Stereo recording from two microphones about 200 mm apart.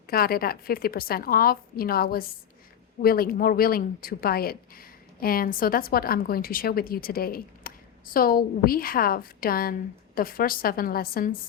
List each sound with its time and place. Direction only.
0.1 s speech: 50° left (ahead or behind)